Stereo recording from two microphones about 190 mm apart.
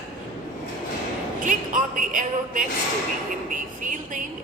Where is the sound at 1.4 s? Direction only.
45° right (ahead or behind).